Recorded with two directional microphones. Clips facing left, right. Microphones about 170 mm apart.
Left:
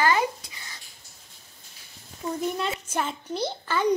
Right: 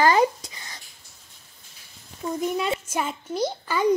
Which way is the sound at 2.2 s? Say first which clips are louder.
Right 2 dB; 15° right (ahead or behind).